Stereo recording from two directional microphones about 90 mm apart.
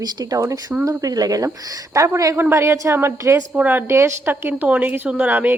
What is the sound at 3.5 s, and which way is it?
Speech, 15° right (ahead or behind).